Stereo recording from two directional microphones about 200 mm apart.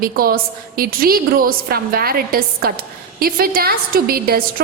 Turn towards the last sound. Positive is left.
turn(degrees=-50)  # may be behind; listen again after turning